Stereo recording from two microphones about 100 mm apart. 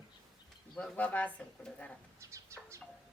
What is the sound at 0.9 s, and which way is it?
A woman's voice, 15° left (ahead or behind).